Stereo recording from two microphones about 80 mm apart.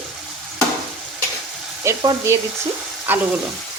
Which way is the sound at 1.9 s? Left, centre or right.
Right.